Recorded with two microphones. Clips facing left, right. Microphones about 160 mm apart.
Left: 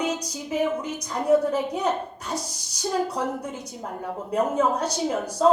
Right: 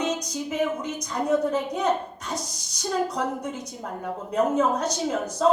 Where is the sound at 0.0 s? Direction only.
10° left (ahead or behind).